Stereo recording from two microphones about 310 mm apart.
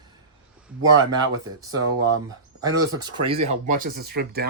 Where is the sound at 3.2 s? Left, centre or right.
Centre.